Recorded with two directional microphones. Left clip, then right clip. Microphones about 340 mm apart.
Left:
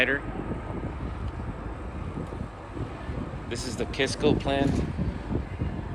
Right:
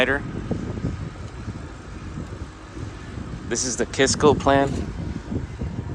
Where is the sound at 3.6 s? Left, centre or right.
Centre.